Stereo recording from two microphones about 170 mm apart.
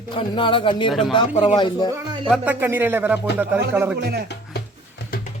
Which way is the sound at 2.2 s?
5° right (ahead or behind).